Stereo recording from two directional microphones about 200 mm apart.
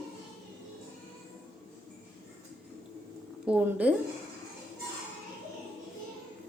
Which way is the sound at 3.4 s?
5° right (ahead or behind).